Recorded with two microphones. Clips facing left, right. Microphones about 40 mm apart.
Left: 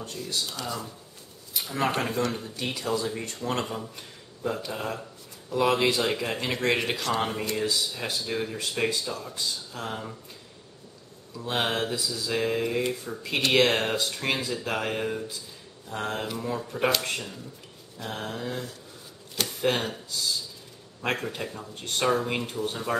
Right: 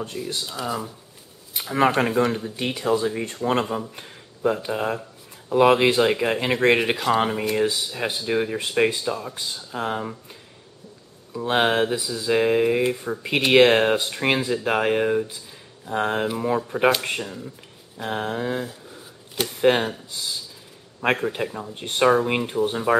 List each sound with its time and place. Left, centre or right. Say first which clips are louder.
0.0 s speech: right 3 dB; right
3.9 s a sound: right 3 dB; right
4.6 s speech: right 7 dB; right
11.3 s speech: right 7 dB; right